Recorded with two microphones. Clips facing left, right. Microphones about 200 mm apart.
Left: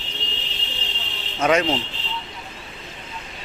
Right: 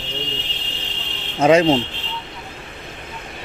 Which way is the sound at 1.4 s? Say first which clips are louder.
Right 6 dB; 30° right (ahead or behind).